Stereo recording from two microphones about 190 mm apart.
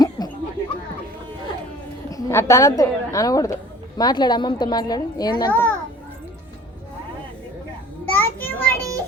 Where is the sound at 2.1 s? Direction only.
15° left (ahead or behind).